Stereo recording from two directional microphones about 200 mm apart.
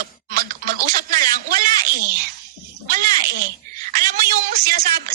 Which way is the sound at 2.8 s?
45° right (ahead or behind).